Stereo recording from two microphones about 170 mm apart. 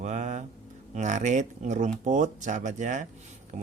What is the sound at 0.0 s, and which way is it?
Mantra, 45° right (ahead or behind).